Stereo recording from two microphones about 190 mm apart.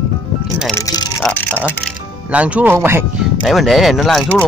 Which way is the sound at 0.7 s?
20° left (ahead or behind).